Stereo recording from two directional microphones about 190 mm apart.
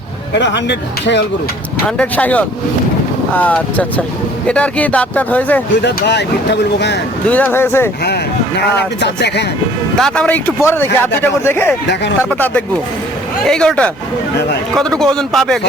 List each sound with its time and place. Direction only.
0.3 s speech: 65° left (ahead or behind)
2.0 s a man's voice: 10° left (ahead or behind)
5.8 s speech: 65° left (ahead or behind)
7.3 s a man's voice: 10° left (ahead or behind)
8.0 s speech: 60° left (ahead or behind)
9.9 s a man's voice: 5° left (ahead or behind)